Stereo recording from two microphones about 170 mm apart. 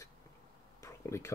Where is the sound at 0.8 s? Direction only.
15° left (ahead or behind).